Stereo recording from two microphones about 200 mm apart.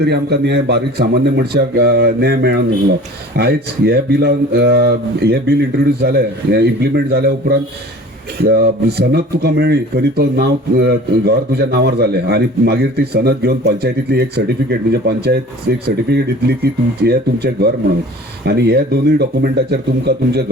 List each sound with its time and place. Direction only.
0.0 s speech: 55° right (ahead or behind)
8.4 s speech: 55° right (ahead or behind)